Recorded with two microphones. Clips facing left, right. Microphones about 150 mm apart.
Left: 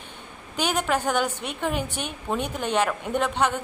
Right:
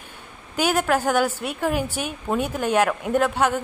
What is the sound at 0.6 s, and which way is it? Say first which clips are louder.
A woman's voice: right 4 dB; 5° right (ahead or behind).